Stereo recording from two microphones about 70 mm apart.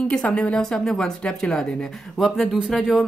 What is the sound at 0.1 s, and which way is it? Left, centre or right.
A woman's voice, centre.